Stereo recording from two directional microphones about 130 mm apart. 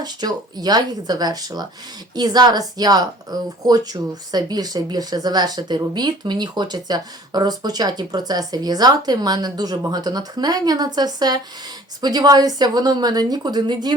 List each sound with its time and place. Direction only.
0.0 s speech: 30° right (ahead or behind)